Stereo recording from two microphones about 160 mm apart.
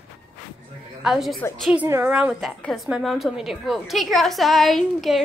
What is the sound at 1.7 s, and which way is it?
A woman's voice, 10° right (ahead or behind).